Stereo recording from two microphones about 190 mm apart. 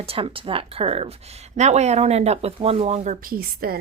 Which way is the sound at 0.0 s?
30° right (ahead or behind).